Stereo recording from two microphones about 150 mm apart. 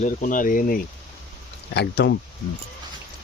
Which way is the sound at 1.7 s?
90° left.